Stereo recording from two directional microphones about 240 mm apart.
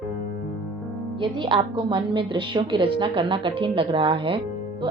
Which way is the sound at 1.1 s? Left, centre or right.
Centre.